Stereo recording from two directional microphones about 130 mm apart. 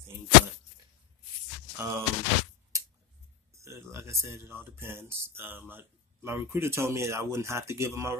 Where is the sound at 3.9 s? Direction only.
20° right (ahead or behind).